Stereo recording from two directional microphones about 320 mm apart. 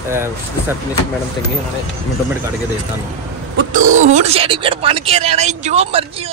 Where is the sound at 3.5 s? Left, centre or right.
Right.